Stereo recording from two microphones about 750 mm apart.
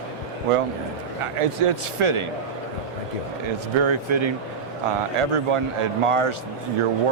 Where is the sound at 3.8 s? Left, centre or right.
Right.